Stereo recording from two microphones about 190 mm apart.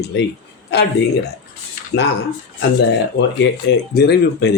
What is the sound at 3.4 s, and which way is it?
A man's voice, 65° left (ahead or behind).